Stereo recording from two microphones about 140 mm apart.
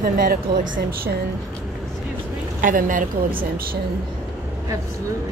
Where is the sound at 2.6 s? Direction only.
70° right (ahead or behind).